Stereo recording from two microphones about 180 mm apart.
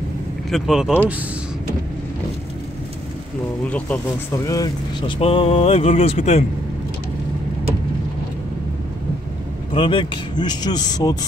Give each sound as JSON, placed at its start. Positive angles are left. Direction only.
{"t": 0.5, "sound": "speech", "side_deg": 0}
{"t": 4.5, "sound": "speech", "side_deg": 20}
{"t": 5.2, "sound": "speech", "side_deg": 30}
{"t": 9.8, "sound": "speech", "side_deg": 30}